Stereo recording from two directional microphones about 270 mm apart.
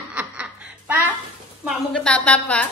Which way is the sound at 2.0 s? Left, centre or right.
Centre.